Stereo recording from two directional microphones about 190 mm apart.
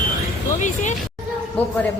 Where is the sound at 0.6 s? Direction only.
40° left (ahead or behind).